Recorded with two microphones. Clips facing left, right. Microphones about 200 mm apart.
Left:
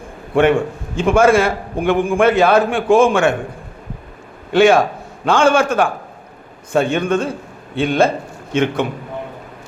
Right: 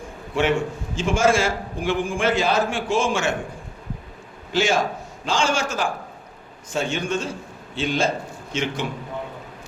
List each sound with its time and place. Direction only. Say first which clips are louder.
0.3 s a man's voice: left 7 dB; 55° left (ahead or behind)
4.5 s a man's voice: left 9 dB; 60° left (ahead or behind)